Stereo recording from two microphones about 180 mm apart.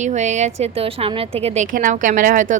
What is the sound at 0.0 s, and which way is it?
A woman's voice, 40° right (ahead or behind).